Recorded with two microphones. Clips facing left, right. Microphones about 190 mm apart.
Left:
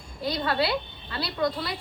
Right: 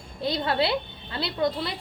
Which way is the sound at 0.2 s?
25° right (ahead or behind).